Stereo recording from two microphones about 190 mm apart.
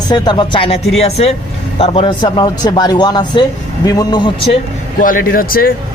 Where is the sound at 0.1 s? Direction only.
20° left (ahead or behind).